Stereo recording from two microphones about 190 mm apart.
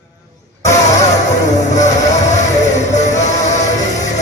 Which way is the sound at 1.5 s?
40° left (ahead or behind).